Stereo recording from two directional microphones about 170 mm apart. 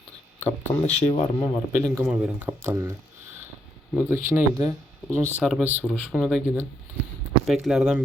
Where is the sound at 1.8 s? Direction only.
5° right (ahead or behind).